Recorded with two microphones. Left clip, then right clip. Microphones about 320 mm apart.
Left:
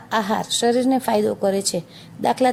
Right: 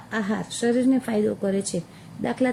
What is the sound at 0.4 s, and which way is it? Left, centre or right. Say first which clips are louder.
Speech: left 4 dB; centre.